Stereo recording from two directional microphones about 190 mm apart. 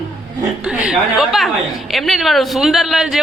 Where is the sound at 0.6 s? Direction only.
5° right (ahead or behind).